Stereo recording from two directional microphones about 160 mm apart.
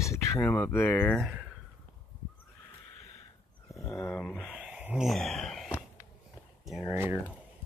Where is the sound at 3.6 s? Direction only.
20° left (ahead or behind).